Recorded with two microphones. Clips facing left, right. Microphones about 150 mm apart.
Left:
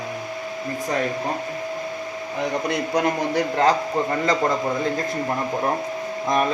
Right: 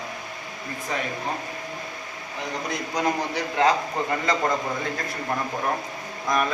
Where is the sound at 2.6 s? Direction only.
60° left (ahead or behind).